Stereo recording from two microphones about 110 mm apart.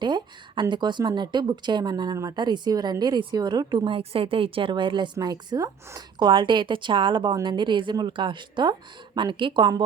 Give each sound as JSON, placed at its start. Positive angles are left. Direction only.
{"t": 0.0, "sound": "a woman's voice", "side_deg": -45}